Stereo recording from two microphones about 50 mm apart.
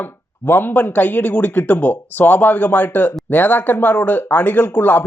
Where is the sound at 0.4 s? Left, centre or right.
Left.